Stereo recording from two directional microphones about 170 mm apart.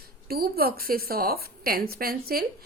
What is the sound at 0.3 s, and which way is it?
A woman's voice, 65° right (ahead or behind).